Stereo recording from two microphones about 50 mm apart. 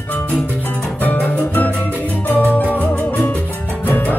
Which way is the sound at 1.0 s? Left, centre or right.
Left.